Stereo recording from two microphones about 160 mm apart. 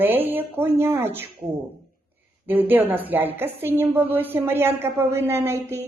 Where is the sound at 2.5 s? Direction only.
10° right (ahead or behind).